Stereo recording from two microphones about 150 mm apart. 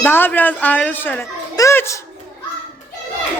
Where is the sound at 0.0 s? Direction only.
15° left (ahead or behind).